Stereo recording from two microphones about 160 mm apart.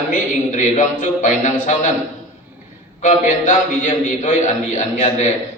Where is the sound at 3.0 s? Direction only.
50° left (ahead or behind).